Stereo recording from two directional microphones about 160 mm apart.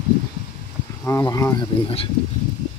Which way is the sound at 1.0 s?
20° left (ahead or behind).